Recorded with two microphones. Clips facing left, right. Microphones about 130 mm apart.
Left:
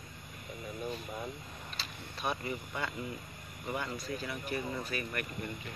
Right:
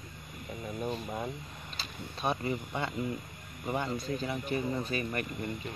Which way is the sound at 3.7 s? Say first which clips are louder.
Right 4 dB; 25° right (ahead or behind).